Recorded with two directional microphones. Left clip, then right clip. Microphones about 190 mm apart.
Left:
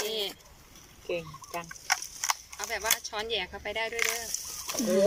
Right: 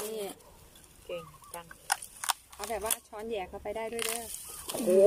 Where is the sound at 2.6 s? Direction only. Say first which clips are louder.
Left 4 dB; 15° right (ahead or behind).